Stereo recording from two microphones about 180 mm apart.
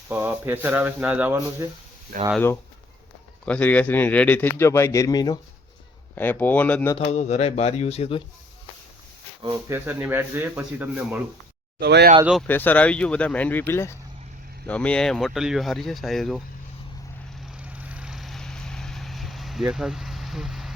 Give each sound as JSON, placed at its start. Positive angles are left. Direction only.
{"t": 0.1, "sound": "speech", "side_deg": -10}
{"t": 3.4, "sound": "a man's voice", "side_deg": 5}
{"t": 6.1, "sound": "a man's voice", "side_deg": 10}
{"t": 6.9, "sound": "speech", "side_deg": 40}
{"t": 9.4, "sound": "speech", "side_deg": -15}
{"t": 11.8, "sound": "speech", "side_deg": -65}
{"t": 12.2, "sound": "speech", "side_deg": -5}
{"t": 12.5, "sound": "a man's voice", "side_deg": 10}
{"t": 17.4, "sound": "vehicle", "side_deg": -5}